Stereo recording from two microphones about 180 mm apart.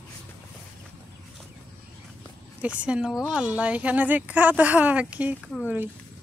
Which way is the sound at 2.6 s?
5° right (ahead or behind).